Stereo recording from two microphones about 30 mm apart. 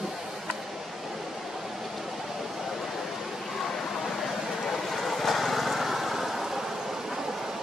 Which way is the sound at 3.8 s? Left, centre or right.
Centre.